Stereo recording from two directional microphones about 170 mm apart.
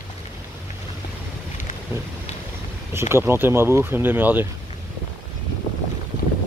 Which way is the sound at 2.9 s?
15° right (ahead or behind).